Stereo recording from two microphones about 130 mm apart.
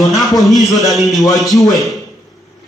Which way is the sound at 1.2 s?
30° left (ahead or behind).